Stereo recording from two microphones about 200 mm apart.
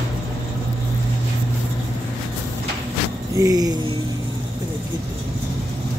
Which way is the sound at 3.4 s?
15° right (ahead or behind).